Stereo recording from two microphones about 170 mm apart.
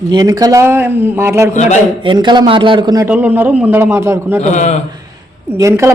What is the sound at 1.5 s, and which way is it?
Speech, 45° left (ahead or behind).